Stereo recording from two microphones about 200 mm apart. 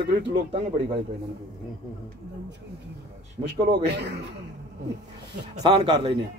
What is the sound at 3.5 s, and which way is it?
Speech, 25° right (ahead or behind).